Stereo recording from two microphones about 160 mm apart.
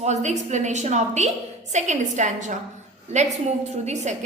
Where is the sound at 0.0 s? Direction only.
45° right (ahead or behind).